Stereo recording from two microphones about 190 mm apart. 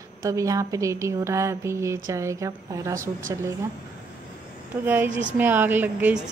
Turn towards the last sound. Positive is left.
turn(degrees=-10)  # may be behind; listen again after turning